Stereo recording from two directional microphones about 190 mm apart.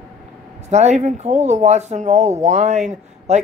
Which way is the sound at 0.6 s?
35° right (ahead or behind).